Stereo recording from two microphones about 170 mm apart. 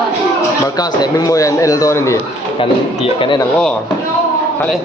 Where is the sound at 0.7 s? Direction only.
25° left (ahead or behind).